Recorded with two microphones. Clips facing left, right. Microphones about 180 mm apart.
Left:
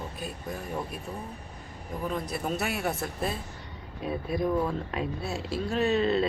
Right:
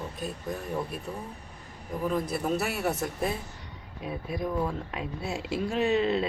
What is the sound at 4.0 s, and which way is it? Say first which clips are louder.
Speech: left 3 dB; 15° right (ahead or behind).